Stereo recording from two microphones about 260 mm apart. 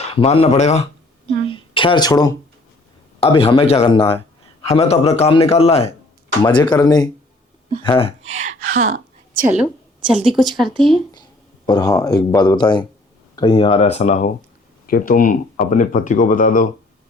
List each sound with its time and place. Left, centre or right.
0.1 s a man's voice: left
1.5 s a sound: centre
3.2 s a man's voice: left
8.2 s a sound: right
10.1 s speech: centre
11.1 s a man's voice: centre; by 16.6 s left